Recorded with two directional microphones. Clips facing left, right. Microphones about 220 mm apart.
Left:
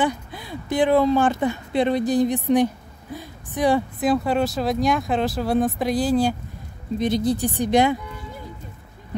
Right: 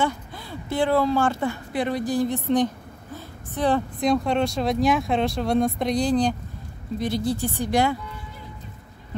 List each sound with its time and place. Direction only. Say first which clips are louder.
0.0 s a woman's voice: left 2 dB; 15° left (ahead or behind)
7.0 s speech: left 4 dB; 20° left (ahead or behind)